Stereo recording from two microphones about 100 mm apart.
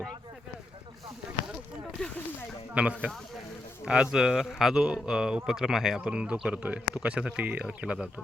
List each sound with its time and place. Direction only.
2.7 s speech: 10° right (ahead or behind)